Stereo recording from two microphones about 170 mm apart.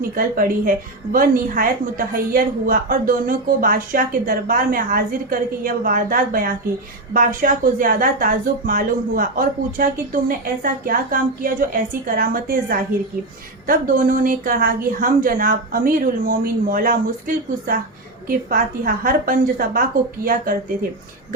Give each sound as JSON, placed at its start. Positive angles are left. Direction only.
{"t": 0.2, "sound": "speech", "side_deg": -55}